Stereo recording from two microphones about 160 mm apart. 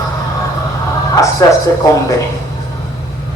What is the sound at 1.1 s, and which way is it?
Speech, 20° left (ahead or behind).